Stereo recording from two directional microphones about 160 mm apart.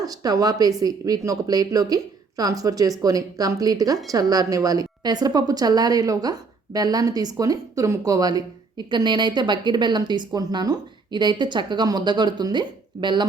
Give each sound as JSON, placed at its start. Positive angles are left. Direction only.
{"t": 0.0, "sound": "a woman's voice", "side_deg": -25}